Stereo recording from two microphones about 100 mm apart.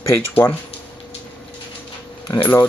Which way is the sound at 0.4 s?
30° left (ahead or behind).